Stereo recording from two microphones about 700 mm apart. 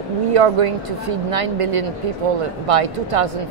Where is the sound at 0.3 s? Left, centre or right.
Right.